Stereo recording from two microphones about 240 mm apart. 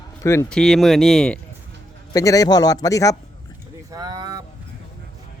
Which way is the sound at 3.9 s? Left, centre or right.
Centre.